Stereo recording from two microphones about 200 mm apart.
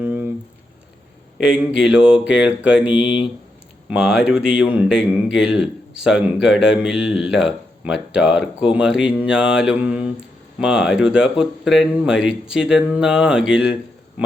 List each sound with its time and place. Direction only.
0.0 s a sound: 10° right (ahead or behind)
1.4 s speech: 5° right (ahead or behind)
2.6 s mantra: 5° right (ahead or behind)
2.9 s speech: 25° left (ahead or behind)
3.8 s speech: 5° right (ahead or behind)